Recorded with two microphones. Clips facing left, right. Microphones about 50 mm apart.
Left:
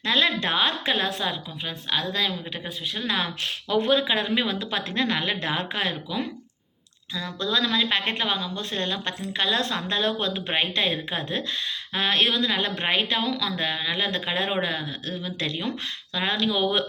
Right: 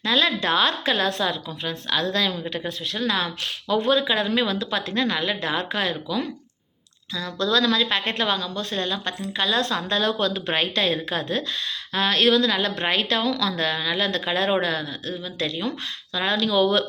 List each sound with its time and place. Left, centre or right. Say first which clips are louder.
0.0 s a woman's voice: right 1 dB; left; by 3.1 s centre
3.1 s a woman's voice: even; left
14.8 s a woman's voice: right 1 dB; left